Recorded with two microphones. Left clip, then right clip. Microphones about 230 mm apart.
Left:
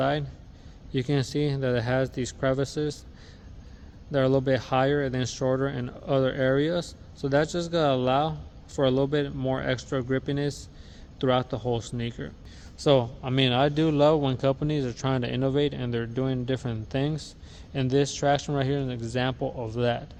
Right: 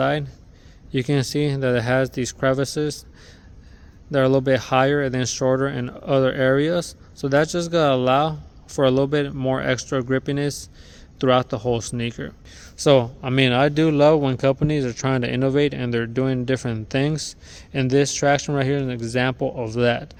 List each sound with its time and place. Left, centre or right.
0.0 s speech: right
4.1 s speech: right